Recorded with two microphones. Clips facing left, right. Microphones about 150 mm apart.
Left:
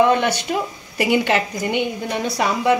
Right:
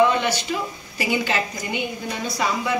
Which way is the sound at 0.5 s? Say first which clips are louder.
Left 4 dB; 50° left (ahead or behind).